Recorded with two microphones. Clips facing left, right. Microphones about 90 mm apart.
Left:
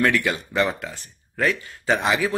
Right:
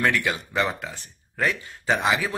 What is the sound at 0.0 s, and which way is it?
A man's voice, 10° right (ahead or behind).